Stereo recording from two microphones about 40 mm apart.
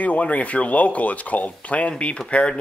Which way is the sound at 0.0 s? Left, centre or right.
Left.